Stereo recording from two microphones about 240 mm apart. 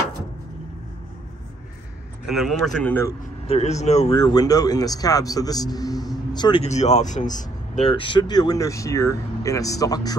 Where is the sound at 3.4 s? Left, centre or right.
Left.